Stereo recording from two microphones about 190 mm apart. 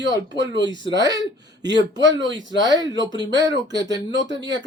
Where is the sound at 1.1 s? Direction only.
65° right (ahead or behind).